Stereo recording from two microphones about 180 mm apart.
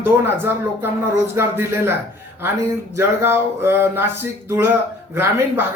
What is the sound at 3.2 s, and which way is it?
Speech, 15° right (ahead or behind).